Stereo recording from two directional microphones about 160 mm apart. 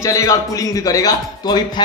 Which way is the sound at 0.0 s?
20° left (ahead or behind).